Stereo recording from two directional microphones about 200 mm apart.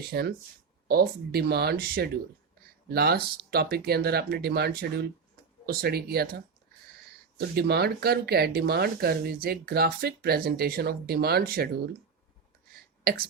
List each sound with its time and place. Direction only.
0.1 s speech: 50° right (ahead or behind)
7.3 s speech: 50° right (ahead or behind)